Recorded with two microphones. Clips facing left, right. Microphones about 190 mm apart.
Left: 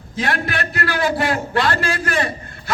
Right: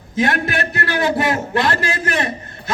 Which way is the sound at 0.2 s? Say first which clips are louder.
Right 4 dB; 20° right (ahead or behind).